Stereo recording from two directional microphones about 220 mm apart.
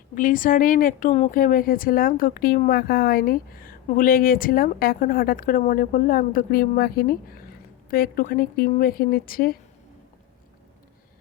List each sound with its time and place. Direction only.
0.1 s a woman's voice: 35° left (ahead or behind)